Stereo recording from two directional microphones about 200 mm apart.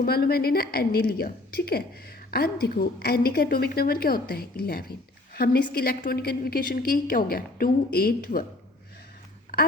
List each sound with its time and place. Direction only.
0.0 s a woman's voice: 50° left (ahead or behind)